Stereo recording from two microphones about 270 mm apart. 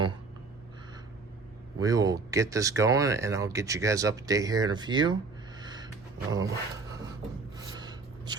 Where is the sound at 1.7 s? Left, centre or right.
Centre.